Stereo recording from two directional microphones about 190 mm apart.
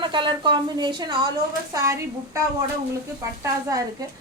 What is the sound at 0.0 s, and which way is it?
A woman's voice, 25° right (ahead or behind).